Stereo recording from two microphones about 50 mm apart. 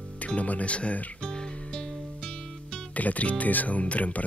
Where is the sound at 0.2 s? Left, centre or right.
Left.